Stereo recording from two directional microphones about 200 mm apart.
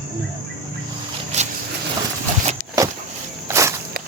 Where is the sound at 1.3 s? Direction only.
35° right (ahead or behind).